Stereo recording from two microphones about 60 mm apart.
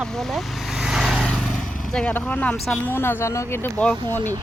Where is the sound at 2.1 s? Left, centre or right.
Left.